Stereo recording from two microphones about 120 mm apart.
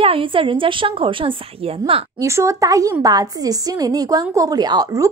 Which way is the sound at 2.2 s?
25° right (ahead or behind).